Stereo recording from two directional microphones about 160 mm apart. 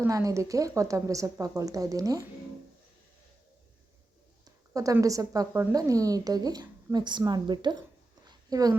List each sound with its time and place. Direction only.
0.0 s a woman's voice: 20° right (ahead or behind)
4.4 s a woman's voice: 20° right (ahead or behind)
8.3 s a sound: 25° right (ahead or behind)